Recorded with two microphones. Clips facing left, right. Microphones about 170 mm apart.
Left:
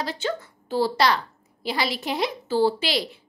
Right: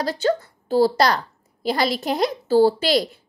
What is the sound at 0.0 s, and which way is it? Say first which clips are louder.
A woman's voice: right 7 dB; 40° right (ahead or behind).